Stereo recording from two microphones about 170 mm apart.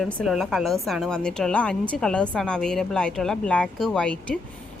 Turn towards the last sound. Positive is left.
turn(degrees=5)  # may be behind; listen again after turning